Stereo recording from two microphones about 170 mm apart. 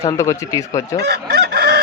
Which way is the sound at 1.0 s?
70° right (ahead or behind).